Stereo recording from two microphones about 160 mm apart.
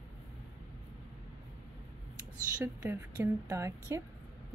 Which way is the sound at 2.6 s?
15° right (ahead or behind).